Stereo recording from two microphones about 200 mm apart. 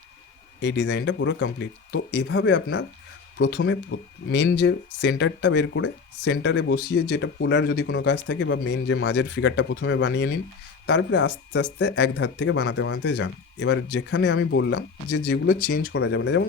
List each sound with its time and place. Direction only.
0.6 s speech: 60° left (ahead or behind); by 15.5 s 90° left
15.9 s speech: 60° left (ahead or behind)